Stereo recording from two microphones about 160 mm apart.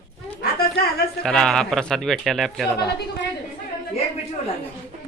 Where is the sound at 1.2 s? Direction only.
5° left (ahead or behind).